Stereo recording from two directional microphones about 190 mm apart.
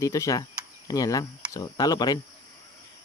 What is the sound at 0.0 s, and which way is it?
Speech, 15° left (ahead or behind).